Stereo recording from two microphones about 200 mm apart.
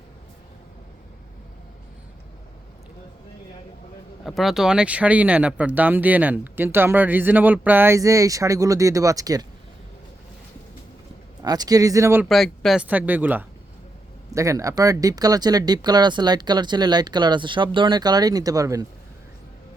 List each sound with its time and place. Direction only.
4.2 s speech: centre (ahead or behind); by 9.5 s 20° right (ahead or behind)
11.4 s speech: 20° right (ahead or behind)
12.2 s speech: centre (ahead or behind); by 18.9 s 15° right (ahead or behind)